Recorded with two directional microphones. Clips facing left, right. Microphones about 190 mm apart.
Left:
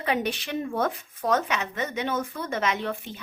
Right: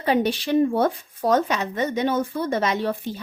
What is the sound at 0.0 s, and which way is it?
Speech, 30° right (ahead or behind).